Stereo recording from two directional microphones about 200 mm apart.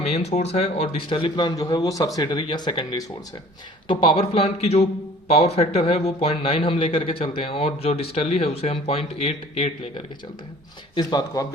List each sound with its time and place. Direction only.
0.1 s a man's voice: 35° left (ahead or behind)
10.9 s a man's voice: 20° left (ahead or behind)